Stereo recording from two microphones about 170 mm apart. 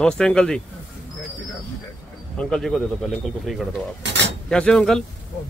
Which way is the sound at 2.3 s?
5° left (ahead or behind).